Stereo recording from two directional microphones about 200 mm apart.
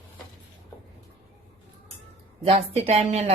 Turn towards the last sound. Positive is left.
turn(degrees=-35)  # may be behind; listen again after turning